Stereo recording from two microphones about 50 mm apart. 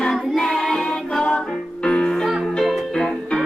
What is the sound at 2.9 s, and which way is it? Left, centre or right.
Music, centre.